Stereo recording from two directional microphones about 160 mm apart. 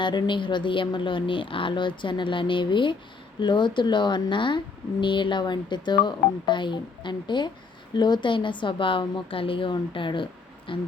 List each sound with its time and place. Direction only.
0.0 s a woman's voice: 30° left (ahead or behind)